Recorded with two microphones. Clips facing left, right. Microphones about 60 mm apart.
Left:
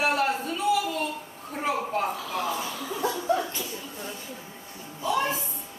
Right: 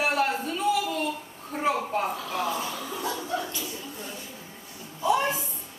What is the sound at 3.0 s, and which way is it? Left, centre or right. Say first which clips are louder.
Chuckle: left 6 dB; left.